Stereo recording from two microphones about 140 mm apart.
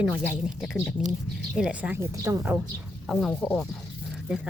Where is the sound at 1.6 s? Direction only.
5° right (ahead or behind).